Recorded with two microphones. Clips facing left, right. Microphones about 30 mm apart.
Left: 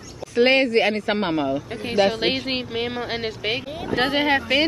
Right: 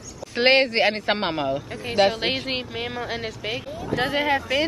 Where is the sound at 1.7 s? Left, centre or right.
Left.